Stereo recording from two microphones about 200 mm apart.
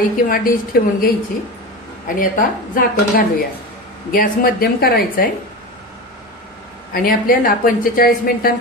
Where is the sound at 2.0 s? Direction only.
45° left (ahead or behind).